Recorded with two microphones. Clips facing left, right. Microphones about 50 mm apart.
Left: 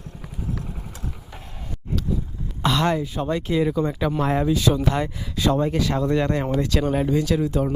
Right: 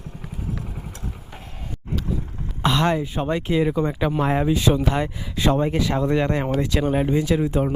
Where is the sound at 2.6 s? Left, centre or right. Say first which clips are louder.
Right 1 dB; centre.